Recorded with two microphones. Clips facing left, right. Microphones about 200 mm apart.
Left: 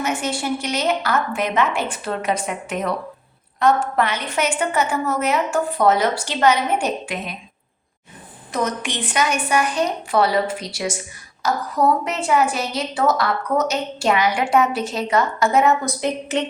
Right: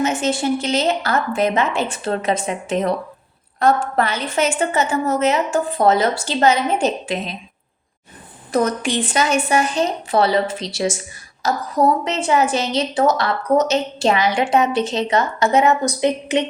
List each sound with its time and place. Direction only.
0.0 s a woman's voice: 25° right (ahead or behind)
8.5 s a woman's voice: 30° right (ahead or behind)
12.0 s a woman's voice: 25° right (ahead or behind)